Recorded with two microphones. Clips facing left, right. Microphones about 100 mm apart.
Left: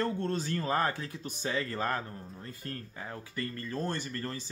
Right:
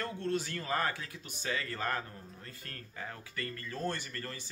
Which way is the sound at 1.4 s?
25° left (ahead or behind).